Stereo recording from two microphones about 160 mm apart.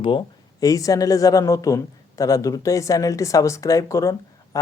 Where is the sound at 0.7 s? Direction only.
20° left (ahead or behind).